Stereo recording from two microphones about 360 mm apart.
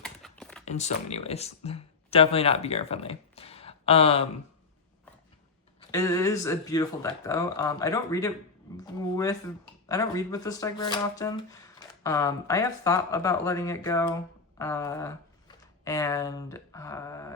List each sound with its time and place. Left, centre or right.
0.0 s a sound: centre
0.6 s speech: centre
5.9 s speech: centre